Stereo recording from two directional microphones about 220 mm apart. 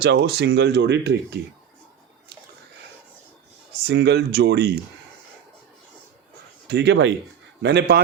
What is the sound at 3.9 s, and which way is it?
Speech, 50° right (ahead or behind).